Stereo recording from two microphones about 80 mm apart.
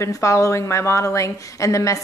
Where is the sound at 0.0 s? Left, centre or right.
Left.